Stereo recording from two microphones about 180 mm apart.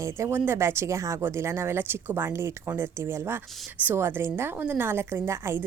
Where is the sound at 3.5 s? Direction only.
Centre (ahead or behind).